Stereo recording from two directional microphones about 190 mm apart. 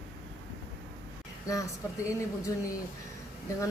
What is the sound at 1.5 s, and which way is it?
Speech, 15° left (ahead or behind).